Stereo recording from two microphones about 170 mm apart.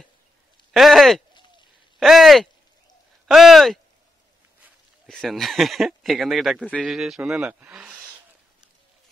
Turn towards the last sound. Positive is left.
turn(degrees=-5)  # may be behind; listen again after turning